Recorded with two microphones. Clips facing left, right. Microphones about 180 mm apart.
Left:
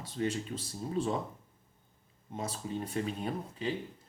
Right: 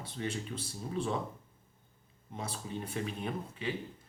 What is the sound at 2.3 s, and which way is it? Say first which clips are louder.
Speech: left 3 dB; 40° left (ahead or behind).